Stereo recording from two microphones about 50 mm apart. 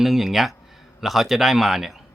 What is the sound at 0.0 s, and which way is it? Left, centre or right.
Speech, centre.